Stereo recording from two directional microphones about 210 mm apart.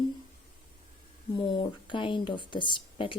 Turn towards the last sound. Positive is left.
turn(degrees=25)  # may be behind; listen again after turning